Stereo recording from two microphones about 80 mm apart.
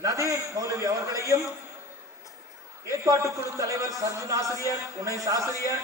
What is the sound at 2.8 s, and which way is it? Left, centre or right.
A man's voice, right.